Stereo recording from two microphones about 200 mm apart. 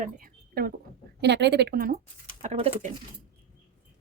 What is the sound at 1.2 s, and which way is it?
Speech, 60° right (ahead or behind).